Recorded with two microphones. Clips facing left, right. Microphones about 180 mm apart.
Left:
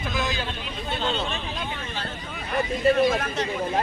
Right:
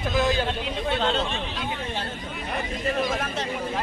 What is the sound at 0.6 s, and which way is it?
Speech, 85° right.